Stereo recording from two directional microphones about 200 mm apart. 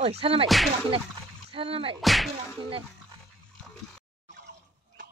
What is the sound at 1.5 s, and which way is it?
Speech, 25° right (ahead or behind).